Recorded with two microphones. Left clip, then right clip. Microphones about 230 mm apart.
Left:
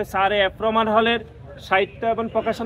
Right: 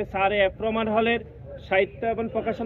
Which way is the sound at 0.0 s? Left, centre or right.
Centre.